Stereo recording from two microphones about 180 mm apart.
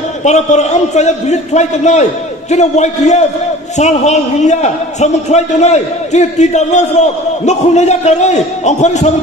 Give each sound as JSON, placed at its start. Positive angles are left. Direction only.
{"t": 0.2, "sound": "a man's voice", "side_deg": 40}